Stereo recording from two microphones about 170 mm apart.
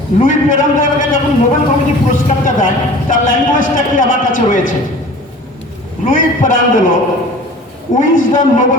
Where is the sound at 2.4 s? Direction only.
50° left (ahead or behind).